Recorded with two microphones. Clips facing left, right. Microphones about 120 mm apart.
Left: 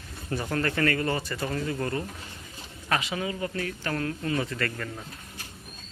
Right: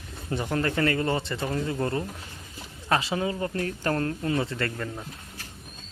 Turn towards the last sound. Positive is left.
turn(degrees=-25)  # may be behind; listen again after turning